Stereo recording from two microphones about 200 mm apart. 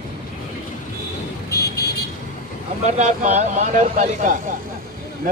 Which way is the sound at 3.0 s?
35° right (ahead or behind).